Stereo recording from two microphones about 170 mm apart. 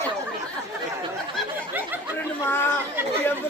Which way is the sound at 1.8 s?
10° right (ahead or behind).